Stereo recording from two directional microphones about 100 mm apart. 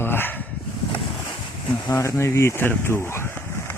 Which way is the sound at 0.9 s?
60° left (ahead or behind).